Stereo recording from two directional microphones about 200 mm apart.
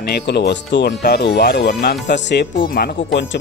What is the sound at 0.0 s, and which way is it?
Speech, 55° left (ahead or behind).